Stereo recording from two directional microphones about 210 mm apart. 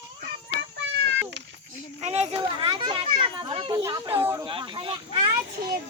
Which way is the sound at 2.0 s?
30° right (ahead or behind).